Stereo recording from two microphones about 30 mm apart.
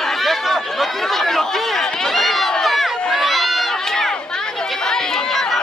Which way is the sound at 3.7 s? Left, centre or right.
Centre.